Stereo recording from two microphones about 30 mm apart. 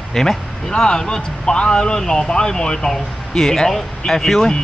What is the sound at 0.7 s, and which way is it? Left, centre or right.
Speech, left.